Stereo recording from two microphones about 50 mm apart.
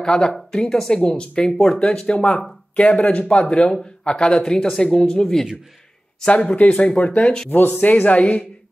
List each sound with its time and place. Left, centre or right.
0.0 s speech: centre
5.2 s speech: centre
6.2 s speech: left
7.4 s speech: left
7.7 s speech: left